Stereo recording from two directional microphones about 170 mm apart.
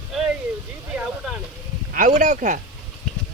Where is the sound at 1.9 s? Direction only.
50° right (ahead or behind).